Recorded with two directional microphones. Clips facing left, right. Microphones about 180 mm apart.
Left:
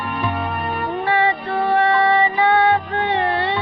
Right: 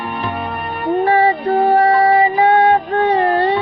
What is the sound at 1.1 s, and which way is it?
Music, 40° right (ahead or behind).